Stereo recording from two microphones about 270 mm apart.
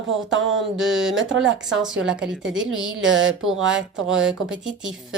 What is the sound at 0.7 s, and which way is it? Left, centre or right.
Speech, right.